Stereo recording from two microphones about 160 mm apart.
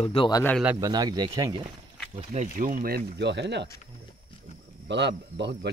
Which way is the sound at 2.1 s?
45° right (ahead or behind).